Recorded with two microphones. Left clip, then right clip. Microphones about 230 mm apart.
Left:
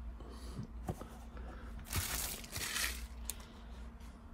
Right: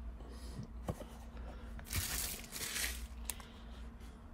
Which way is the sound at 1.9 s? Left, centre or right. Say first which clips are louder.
Left 1 dB; centre.